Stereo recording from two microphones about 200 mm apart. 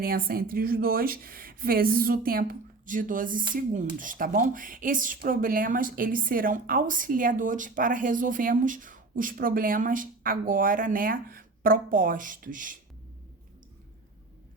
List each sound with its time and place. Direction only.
0.0 s speech: 50° right (ahead or behind)
3.5 s dishes: 40° right (ahead or behind)
3.9 s speech: 40° right (ahead or behind)